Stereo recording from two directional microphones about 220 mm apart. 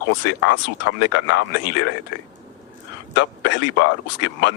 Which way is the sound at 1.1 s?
55° left (ahead or behind).